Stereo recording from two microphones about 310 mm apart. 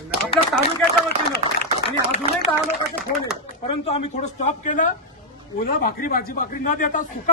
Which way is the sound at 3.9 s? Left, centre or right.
Left.